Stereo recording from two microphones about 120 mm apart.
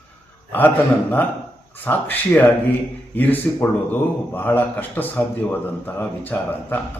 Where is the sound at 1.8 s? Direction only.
15° left (ahead or behind).